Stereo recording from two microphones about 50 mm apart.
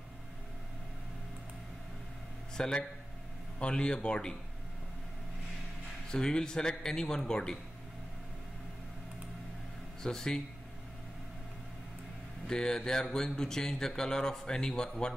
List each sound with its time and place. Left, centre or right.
2.5 s speech: centre
6.1 s speech: centre
10.0 s speech: centre
12.4 s speech: centre